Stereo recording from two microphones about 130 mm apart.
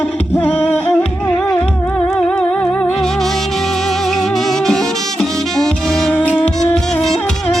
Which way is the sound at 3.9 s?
5° left (ahead or behind).